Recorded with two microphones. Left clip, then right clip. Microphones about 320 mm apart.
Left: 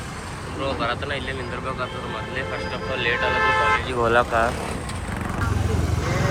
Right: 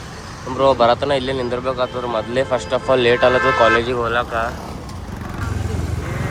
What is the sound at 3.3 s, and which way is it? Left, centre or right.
Speech, left.